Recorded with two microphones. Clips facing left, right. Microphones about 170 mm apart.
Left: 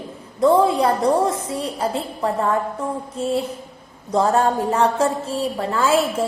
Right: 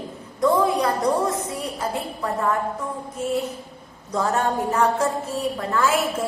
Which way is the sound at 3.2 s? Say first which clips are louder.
Left 2 dB; 30° left (ahead or behind).